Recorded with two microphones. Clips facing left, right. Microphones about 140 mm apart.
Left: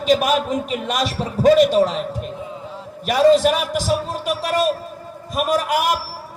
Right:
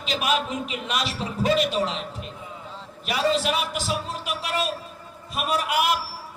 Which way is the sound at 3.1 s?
40° left (ahead or behind).